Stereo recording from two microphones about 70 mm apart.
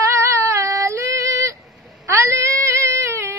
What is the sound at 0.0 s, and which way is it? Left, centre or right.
Female singing, right.